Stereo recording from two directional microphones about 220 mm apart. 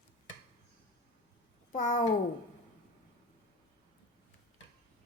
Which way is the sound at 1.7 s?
35° left (ahead or behind).